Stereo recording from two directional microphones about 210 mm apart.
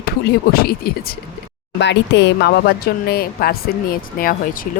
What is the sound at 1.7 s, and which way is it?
Speech, 55° left (ahead or behind).